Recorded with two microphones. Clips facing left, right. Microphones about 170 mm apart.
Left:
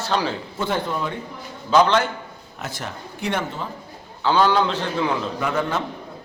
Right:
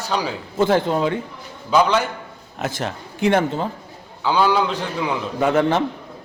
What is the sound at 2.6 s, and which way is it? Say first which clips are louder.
Speech: right 6 dB; 90° right.